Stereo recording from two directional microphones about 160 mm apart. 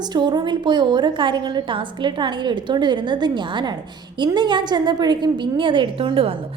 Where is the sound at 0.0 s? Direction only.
25° right (ahead or behind).